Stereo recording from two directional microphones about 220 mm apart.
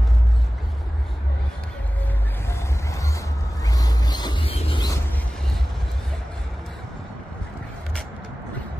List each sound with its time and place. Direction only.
2.4 s music: 15° left (ahead or behind)